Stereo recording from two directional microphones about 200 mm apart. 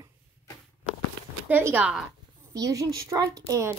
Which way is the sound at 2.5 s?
15° right (ahead or behind).